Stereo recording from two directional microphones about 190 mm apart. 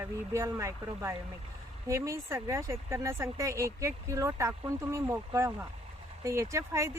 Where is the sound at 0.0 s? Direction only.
15° right (ahead or behind).